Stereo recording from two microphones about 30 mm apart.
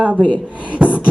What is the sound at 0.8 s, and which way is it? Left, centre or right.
Beatboxing, right.